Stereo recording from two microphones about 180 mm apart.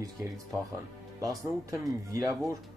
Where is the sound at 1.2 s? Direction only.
20° right (ahead or behind).